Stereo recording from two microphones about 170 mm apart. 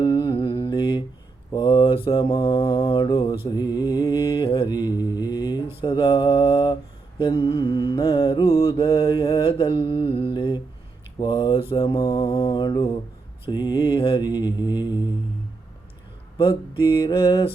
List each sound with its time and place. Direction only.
0.0 s mantra: 30° left (ahead or behind)
16.4 s mantra: 30° left (ahead or behind)